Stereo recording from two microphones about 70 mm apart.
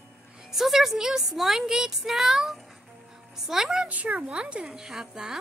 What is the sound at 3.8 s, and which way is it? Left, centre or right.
A woman's voice, centre.